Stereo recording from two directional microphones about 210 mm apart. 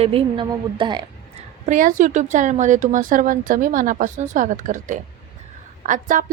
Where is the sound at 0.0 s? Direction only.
25° right (ahead or behind).